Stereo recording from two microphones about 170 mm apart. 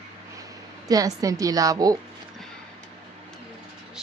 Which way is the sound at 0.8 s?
20° right (ahead or behind).